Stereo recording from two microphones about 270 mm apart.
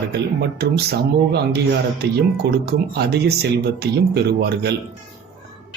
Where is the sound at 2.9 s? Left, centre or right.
Right.